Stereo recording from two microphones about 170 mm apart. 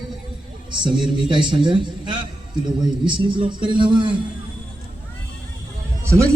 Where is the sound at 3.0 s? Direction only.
30° right (ahead or behind).